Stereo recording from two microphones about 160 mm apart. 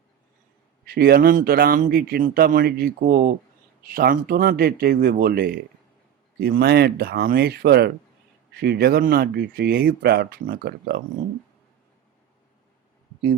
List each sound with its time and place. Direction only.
0.9 s a man's voice: 75° right (ahead or behind)